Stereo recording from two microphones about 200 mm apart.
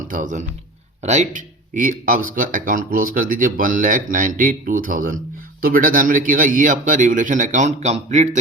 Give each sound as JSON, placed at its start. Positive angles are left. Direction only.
{"t": 0.1, "sound": "speech", "side_deg": -40}